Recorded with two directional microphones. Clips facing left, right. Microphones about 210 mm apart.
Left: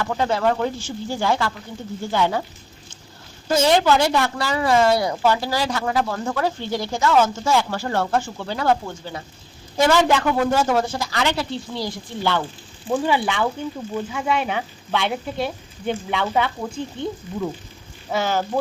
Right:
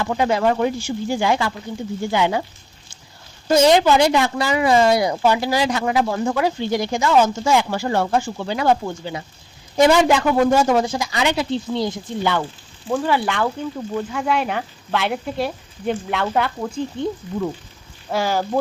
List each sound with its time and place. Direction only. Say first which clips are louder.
0.0 s a woman's voice: right 2 dB; 15° right (ahead or behind)
3.5 s a woman's voice: right 3 dB; 15° right (ahead or behind)
13.1 s speech: right 2 dB; centre (ahead or behind)